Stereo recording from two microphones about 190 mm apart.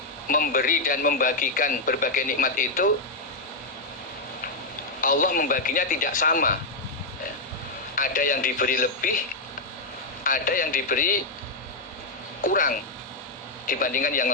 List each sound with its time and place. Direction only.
0.3 s a man's voice: 45° left (ahead or behind)
4.9 s a man's voice: 45° left (ahead or behind)
7.9 s a man's voice: 45° left (ahead or behind)
10.2 s a man's voice: 45° left (ahead or behind)
12.4 s a man's voice: 45° left (ahead or behind)